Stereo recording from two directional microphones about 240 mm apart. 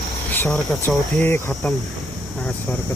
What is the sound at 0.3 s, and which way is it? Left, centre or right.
Speech, centre.